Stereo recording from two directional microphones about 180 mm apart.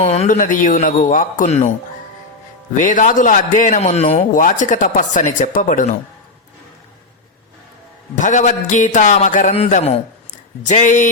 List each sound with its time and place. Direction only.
0.0 s a man's voice: 35° left (ahead or behind)
2.7 s a man's voice: 45° left (ahead or behind)
4.4 s a man's voice: 45° left (ahead or behind)
8.1 s a man's voice: 45° left (ahead or behind)